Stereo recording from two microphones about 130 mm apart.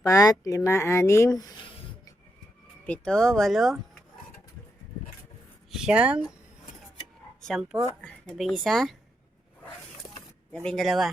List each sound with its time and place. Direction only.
0.0 s speech: 25° left (ahead or behind)
2.8 s speech: 10° left (ahead or behind)
5.7 s speech: 5° right (ahead or behind)
7.4 s speech: centre (ahead or behind)
10.5 s speech: 5° left (ahead or behind)